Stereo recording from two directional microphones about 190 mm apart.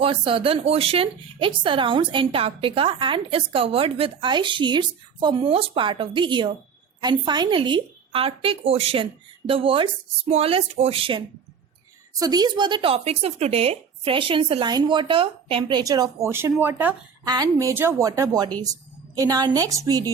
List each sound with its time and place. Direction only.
0.0 s speech: 30° right (ahead or behind)
12.2 s speech: 20° right (ahead or behind)